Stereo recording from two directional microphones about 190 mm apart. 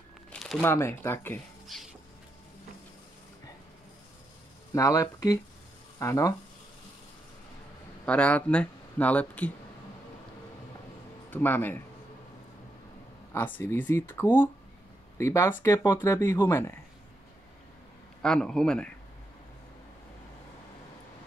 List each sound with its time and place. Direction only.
0.3 s crumpling: centre (ahead or behind)
0.6 s speech: 10° left (ahead or behind)
4.7 s speech: 15° left (ahead or behind)
8.0 s speech: 5° left (ahead or behind)
11.2 s speech: 10° left (ahead or behind)
13.3 s speech: 10° left (ahead or behind)
18.2 s a man's voice: 5° left (ahead or behind)